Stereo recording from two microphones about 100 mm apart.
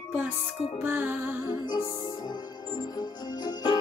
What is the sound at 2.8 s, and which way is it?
Music, 45° left (ahead or behind).